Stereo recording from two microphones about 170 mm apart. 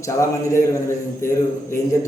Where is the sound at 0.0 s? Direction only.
15° left (ahead or behind).